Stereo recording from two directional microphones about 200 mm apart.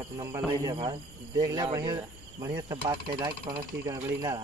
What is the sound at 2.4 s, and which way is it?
Mechanisms, 15° right (ahead or behind).